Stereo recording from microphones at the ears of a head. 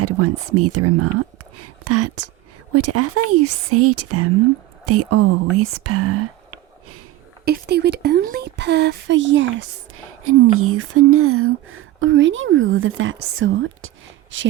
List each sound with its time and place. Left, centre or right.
0.0 s speech: right